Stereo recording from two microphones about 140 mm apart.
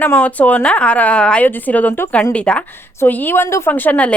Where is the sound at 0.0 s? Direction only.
10° left (ahead or behind).